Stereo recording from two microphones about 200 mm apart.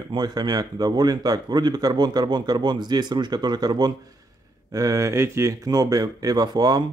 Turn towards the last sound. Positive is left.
turn(degrees=-20)  # may be behind; listen again after turning